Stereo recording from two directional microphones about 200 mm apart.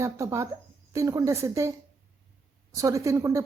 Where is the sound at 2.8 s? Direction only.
15° right (ahead or behind).